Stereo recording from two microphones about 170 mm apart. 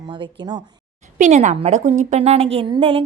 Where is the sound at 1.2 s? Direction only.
45° right (ahead or behind).